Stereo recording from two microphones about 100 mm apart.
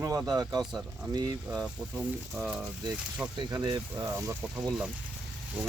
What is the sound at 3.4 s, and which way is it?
Speech, 45° right (ahead or behind).